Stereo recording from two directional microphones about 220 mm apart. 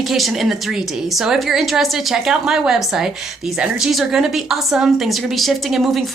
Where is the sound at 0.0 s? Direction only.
Centre (ahead or behind).